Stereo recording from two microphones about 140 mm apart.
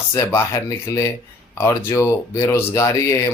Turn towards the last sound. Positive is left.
turn(degrees=25)  # may be behind; listen again after turning